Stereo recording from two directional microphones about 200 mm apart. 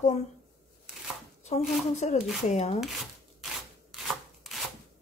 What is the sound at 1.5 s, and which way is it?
A woman's voice, 35° left (ahead or behind).